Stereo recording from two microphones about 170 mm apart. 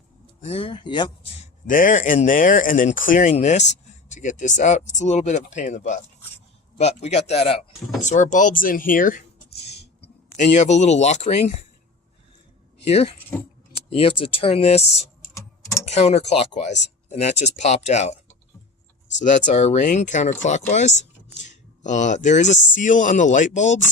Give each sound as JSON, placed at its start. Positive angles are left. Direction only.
{"t": 0.4, "sound": "speech", "side_deg": 35}
{"t": 1.6, "sound": "speech", "side_deg": 50}
{"t": 12.9, "sound": "speech", "side_deg": 35}
{"t": 15.9, "sound": "speech", "side_deg": 40}
{"t": 19.3, "sound": "speech", "side_deg": 40}